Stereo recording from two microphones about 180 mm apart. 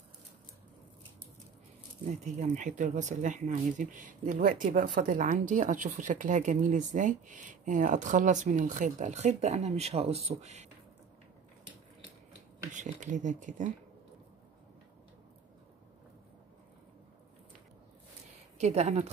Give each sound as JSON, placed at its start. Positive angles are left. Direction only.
{"t": 2.0, "sound": "speech", "side_deg": -45}
{"t": 12.7, "sound": "speech", "side_deg": -45}
{"t": 18.6, "sound": "speech", "side_deg": -40}